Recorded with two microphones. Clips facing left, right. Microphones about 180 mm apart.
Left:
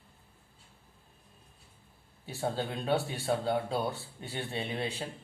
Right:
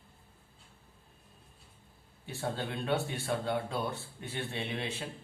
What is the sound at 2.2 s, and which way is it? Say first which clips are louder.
Speech: left 3 dB; 35° left (ahead or behind).